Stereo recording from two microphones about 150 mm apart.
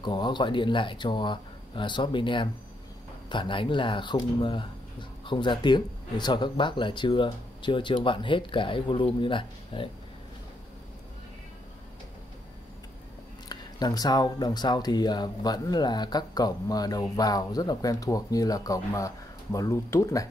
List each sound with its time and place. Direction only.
0.0 s speech: 30° left (ahead or behind)
13.5 s speech: 25° left (ahead or behind)